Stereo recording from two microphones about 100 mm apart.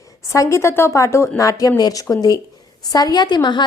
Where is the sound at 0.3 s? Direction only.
30° left (ahead or behind).